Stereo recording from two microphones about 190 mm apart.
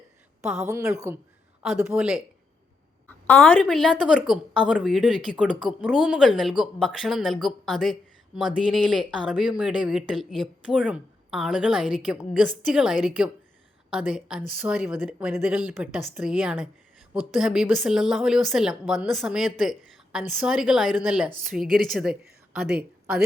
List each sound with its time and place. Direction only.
0.4 s speech: 5° right (ahead or behind)
0.7 s a woman's voice: 15° right (ahead or behind)
3.1 s speech: 10° left (ahead or behind)